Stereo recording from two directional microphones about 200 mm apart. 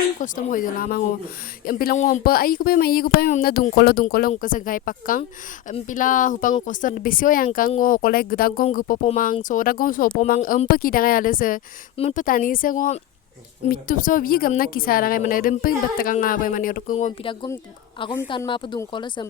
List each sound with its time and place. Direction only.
0.2 s a woman's voice: 40° left (ahead or behind); by 19.2 s 25° left (ahead or behind)